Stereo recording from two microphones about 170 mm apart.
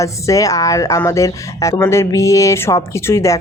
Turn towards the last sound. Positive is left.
turn(degrees=15)  # may be behind; listen again after turning